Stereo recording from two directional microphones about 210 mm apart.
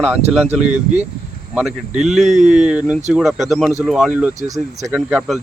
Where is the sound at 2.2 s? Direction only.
35° right (ahead or behind).